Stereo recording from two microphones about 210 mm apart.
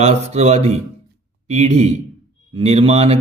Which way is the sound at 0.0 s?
30° right (ahead or behind).